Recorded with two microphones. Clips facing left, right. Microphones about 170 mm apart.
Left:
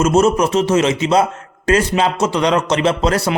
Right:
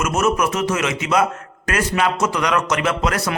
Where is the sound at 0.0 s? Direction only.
30° left (ahead or behind).